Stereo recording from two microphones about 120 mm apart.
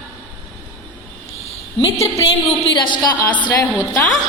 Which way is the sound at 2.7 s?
40° left (ahead or behind).